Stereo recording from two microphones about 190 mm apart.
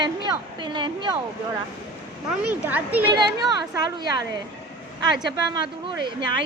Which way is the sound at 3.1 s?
20° right (ahead or behind).